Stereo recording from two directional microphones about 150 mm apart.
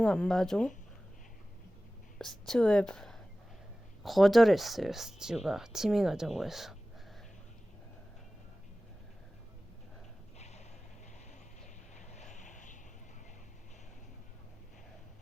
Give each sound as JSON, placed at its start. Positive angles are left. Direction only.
{"t": 0.0, "sound": "speech", "side_deg": 5}
{"t": 2.1, "sound": "speech", "side_deg": 5}
{"t": 10.3, "sound": "a sound", "side_deg": 50}
{"t": 11.6, "sound": "vehicle", "side_deg": 50}